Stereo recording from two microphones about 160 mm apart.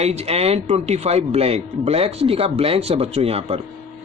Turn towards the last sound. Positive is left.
turn(degrees=-40)  # may be behind; listen again after turning